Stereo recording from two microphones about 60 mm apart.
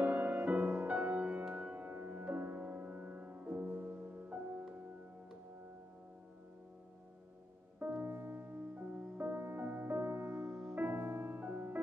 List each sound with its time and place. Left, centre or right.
0.0 s music: right
8.0 s music: right
8.7 s music: right
9.2 s music: right